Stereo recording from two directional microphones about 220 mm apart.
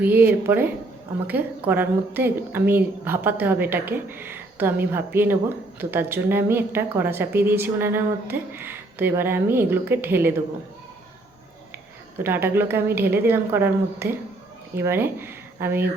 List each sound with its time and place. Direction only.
0.0 s a woman's voice: 10° right (ahead or behind)
12.2 s a woman's voice: 10° right (ahead or behind)